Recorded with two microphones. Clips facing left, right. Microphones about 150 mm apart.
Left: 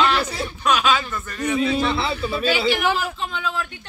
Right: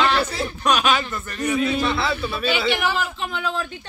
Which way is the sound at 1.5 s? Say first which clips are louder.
Left 1 dB; 25° left (ahead or behind).